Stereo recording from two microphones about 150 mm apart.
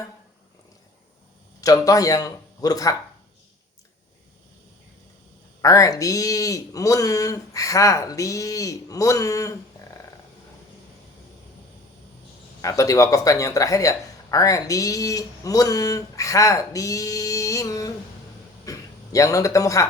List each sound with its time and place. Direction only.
1.6 s speech: 25° left (ahead or behind)
5.6 s speech: 20° left (ahead or behind)
12.6 s speech: 20° left (ahead or behind)
18.6 s a sound: 20° left (ahead or behind)